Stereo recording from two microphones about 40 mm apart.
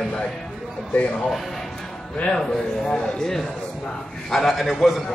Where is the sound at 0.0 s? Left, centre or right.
Centre.